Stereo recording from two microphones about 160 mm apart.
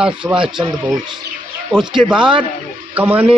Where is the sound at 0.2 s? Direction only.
10° right (ahead or behind).